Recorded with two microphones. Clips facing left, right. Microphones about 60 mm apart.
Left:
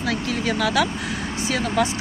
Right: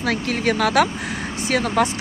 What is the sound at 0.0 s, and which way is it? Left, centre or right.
Speech, right.